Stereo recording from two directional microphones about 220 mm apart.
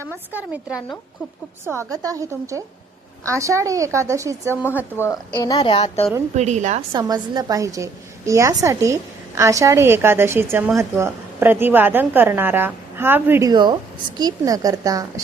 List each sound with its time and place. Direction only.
0.3 s a woman's voice: 5° right (ahead or behind)
4.9 s a woman's voice: 15° left (ahead or behind)
6.3 s a woman's voice: 30° right (ahead or behind)
6.9 s a woman's voice: 20° right (ahead or behind)